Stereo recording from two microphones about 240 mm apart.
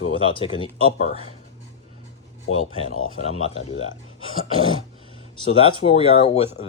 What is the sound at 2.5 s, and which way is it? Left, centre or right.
Speech, left.